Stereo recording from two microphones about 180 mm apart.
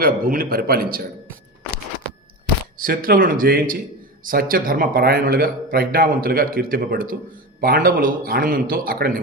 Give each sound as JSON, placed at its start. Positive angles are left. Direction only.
{"t": 0.0, "sound": "a man's voice", "side_deg": -55}
{"t": 2.7, "sound": "a man's voice", "side_deg": -50}